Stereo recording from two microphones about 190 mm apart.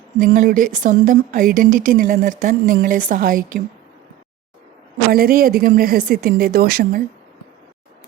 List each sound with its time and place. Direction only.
0.2 s speech: 45° right (ahead or behind)
5.1 s speech: 50° right (ahead or behind)